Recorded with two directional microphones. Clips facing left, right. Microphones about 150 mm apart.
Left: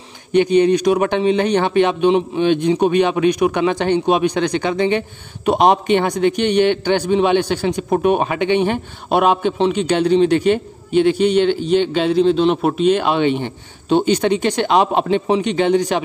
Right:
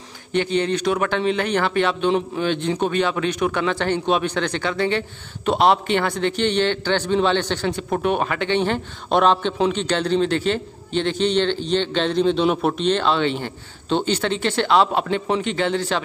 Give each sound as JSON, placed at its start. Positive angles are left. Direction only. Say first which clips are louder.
{"t": 0.3, "sound": "a man's voice", "louder": "left 8 dB", "side_deg": 15}